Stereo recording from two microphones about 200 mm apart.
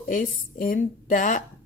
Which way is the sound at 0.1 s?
40° left (ahead or behind).